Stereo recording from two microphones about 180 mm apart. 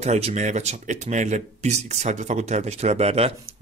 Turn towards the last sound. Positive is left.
turn(degrees=-35)  # may be behind; listen again after turning